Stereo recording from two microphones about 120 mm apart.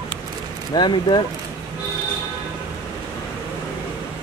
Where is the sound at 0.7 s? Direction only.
40° left (ahead or behind).